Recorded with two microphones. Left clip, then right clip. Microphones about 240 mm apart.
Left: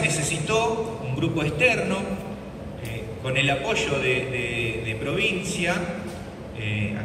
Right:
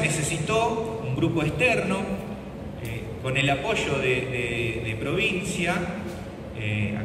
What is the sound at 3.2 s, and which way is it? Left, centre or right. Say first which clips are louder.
A man's voice: left 1 dB; right.